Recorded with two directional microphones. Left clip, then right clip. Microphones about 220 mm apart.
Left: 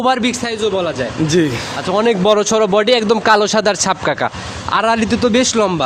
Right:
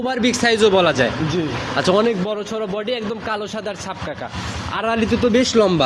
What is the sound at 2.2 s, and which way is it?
Speech, 40° left (ahead or behind).